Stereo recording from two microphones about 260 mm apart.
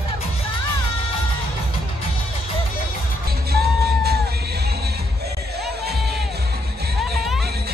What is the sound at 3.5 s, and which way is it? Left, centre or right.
Music, right.